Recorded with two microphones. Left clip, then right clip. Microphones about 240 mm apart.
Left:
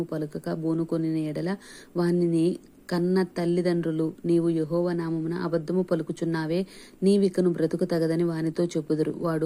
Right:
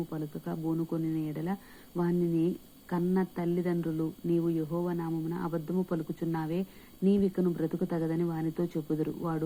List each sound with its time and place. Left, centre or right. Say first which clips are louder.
0.1 s speech: left 7 dB; centre